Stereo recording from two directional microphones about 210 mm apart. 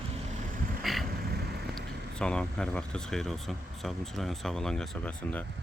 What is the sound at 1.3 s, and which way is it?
Vehicle, 50° right (ahead or behind).